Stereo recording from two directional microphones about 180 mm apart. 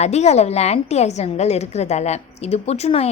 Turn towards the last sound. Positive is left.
turn(degrees=35)  # may be behind; listen again after turning